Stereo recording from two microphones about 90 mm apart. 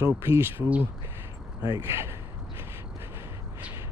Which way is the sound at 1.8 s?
30° right (ahead or behind).